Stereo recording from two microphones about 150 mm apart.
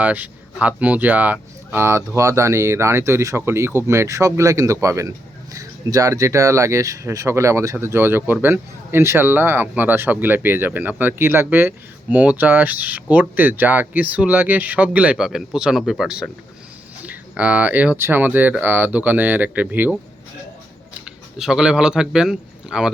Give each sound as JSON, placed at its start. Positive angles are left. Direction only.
{"t": 0.0, "sound": "speech", "side_deg": -10}
{"t": 21.0, "sound": "speech", "side_deg": -5}